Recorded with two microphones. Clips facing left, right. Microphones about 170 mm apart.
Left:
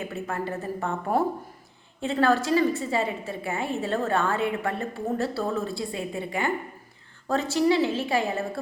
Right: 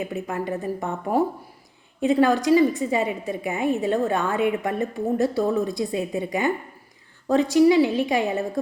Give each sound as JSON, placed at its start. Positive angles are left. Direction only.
{"t": 0.0, "sound": "a woman's voice", "side_deg": -15}